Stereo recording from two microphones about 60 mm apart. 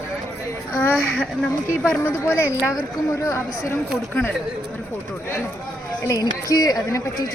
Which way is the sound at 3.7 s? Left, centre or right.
Left.